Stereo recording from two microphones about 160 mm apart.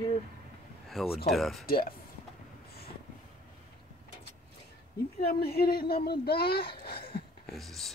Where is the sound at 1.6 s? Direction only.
70° left (ahead or behind).